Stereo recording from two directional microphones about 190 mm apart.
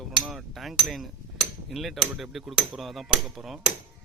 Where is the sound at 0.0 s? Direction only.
Centre (ahead or behind).